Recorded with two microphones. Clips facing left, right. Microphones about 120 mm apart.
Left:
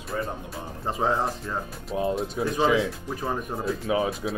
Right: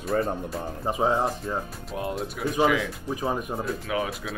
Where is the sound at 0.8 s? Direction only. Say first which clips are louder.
Right 1 dB; 15° right (ahead or behind).